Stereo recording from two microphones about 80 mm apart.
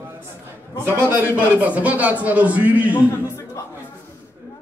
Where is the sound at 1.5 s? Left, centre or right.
Right.